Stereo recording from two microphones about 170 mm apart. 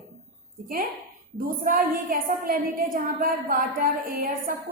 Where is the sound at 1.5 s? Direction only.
55° right (ahead or behind).